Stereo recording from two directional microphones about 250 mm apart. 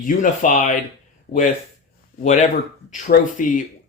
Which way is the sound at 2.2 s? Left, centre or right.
Left.